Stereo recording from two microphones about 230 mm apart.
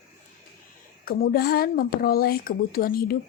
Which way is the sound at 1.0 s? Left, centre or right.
Left.